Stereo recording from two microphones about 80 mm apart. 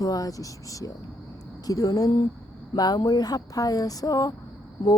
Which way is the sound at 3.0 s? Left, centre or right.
Left.